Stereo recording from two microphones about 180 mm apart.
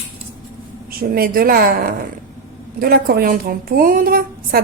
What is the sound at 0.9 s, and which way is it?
A woman's voice, 55° right (ahead or behind).